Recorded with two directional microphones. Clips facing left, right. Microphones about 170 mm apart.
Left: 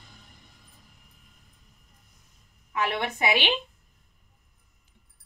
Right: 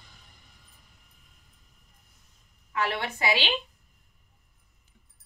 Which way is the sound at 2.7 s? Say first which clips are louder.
Left 2 dB; 20° left (ahead or behind).